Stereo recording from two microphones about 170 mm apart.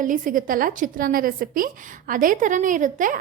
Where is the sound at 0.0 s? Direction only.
50° right (ahead or behind).